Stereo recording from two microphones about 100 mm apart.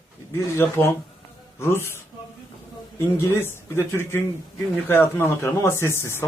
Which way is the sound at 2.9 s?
25° left (ahead or behind).